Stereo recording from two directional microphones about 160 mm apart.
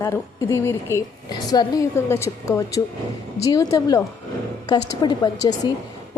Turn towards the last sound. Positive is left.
turn(degrees=25)  # may be behind; listen again after turning